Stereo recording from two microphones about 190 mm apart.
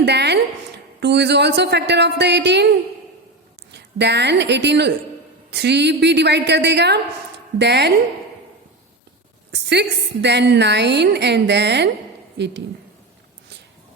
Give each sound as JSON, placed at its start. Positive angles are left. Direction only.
{"t": 0.0, "sound": "a woman's voice", "side_deg": -60}
{"t": 3.7, "sound": "a woman's voice", "side_deg": -65}
{"t": 9.5, "sound": "a woman's voice", "side_deg": -65}